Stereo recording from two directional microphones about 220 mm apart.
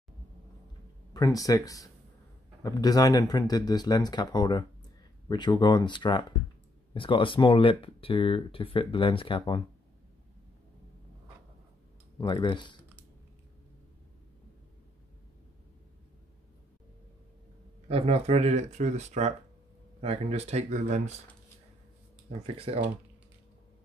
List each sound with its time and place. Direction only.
1.1 s speech: 15° left (ahead or behind)
12.2 s speech: 20° left (ahead or behind)
17.8 s speech: 25° right (ahead or behind)